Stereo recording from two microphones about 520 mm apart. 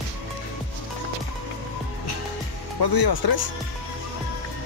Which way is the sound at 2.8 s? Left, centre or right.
Left.